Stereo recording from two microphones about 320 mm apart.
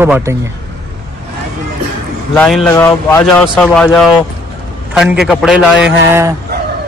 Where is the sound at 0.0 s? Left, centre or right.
Centre.